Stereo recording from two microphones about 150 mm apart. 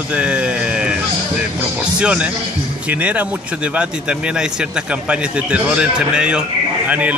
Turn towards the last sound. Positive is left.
turn(degrees=-10)  # may be behind; listen again after turning